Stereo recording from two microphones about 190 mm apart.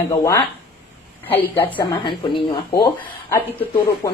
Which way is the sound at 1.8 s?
25° left (ahead or behind).